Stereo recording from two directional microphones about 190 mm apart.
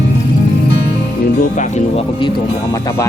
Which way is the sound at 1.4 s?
40° left (ahead or behind).